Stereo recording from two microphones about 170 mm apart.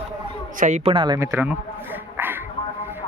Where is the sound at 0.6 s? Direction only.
45° right (ahead or behind).